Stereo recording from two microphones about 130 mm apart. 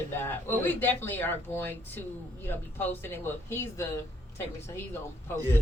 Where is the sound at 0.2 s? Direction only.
15° left (ahead or behind).